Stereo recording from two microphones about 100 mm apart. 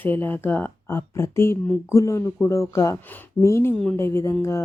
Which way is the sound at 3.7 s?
10° left (ahead or behind).